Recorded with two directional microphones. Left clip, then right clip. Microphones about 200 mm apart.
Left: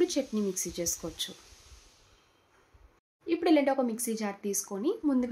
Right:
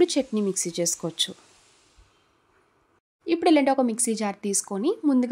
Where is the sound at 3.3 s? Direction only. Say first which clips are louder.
Right 5 dB; 55° right (ahead or behind).